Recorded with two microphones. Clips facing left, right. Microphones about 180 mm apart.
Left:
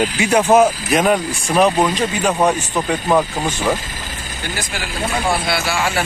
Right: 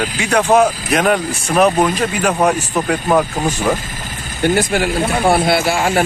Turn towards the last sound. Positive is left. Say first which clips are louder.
# right 5 dB
turn(degrees=-50)  # may be behind; listen again after turning